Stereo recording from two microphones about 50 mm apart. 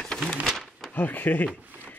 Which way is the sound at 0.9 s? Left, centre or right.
Left.